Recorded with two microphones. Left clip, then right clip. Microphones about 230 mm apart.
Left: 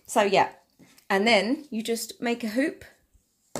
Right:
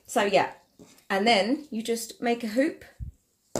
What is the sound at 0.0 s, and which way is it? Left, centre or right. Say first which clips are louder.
Speech: left 2 dB; left.